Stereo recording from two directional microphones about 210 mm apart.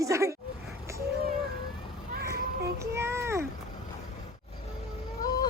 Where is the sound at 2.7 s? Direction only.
10° right (ahead or behind).